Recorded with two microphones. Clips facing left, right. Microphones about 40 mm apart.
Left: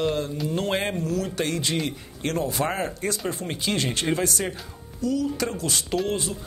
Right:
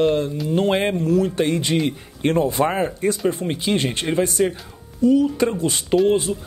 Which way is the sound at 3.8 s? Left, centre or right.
Right.